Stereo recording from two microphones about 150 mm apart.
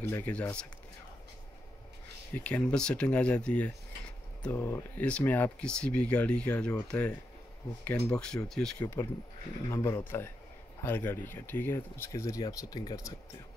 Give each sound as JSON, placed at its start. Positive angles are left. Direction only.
{"t": 0.0, "sound": "speech", "side_deg": 10}
{"t": 2.3, "sound": "speech", "side_deg": 10}
{"t": 8.7, "sound": "speech", "side_deg": 20}